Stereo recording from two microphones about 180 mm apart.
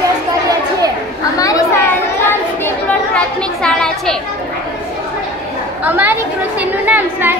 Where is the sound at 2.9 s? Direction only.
5° left (ahead or behind).